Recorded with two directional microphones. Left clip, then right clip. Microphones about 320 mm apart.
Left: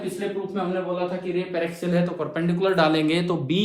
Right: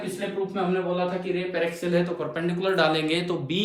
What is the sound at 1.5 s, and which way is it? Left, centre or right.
Speech, centre.